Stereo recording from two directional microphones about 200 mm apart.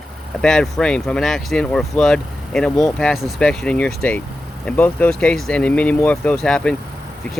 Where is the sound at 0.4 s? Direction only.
5° left (ahead or behind).